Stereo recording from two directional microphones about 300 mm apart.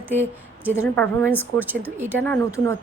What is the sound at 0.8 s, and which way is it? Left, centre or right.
Speech, centre.